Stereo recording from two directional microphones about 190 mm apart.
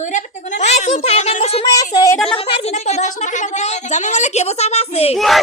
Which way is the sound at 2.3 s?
30° left (ahead or behind).